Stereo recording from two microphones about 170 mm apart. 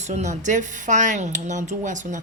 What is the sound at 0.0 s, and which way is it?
Speech, 45° right (ahead or behind).